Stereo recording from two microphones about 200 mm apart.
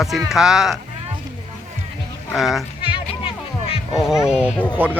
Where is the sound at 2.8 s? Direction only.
25° left (ahead or behind).